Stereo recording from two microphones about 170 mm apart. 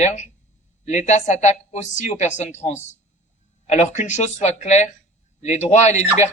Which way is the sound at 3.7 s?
45° left (ahead or behind).